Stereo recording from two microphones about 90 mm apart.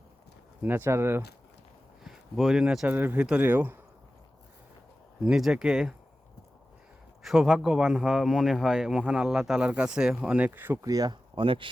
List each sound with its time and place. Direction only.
0.6 s speech: 25° right (ahead or behind)
2.0 s speech: 5° right (ahead or behind)
2.9 s speech: 20° right (ahead or behind)
5.2 s speech: 5° right (ahead or behind)
7.2 s speech: centre (ahead or behind); by 10.8 s 20° right (ahead or behind)
10.8 s speech: 45° right (ahead or behind)
11.3 s chopping: 70° right (ahead or behind)